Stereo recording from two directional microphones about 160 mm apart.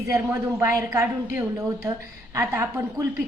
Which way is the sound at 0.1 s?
15° right (ahead or behind).